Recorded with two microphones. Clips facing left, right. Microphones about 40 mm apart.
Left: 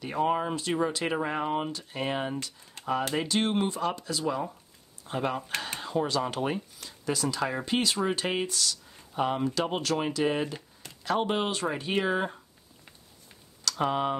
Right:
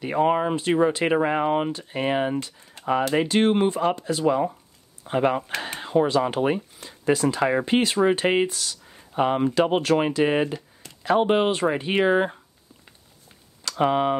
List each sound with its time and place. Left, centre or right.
0.0 s speech: right
13.7 s speech: right